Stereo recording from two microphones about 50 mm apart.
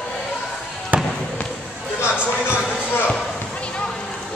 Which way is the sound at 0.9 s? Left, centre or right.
Right.